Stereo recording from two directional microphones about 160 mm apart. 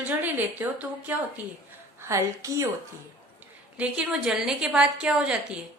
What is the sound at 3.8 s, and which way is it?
A woman's voice, 5° right (ahead or behind).